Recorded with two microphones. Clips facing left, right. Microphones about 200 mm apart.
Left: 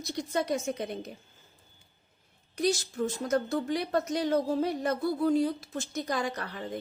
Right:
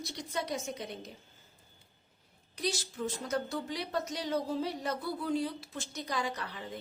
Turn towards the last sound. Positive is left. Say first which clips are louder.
# left 4 dB
turn(degrees=50)  # may be behind; listen again after turning